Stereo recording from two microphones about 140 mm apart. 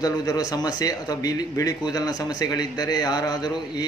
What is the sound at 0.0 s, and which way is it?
A man's voice, 25° left (ahead or behind).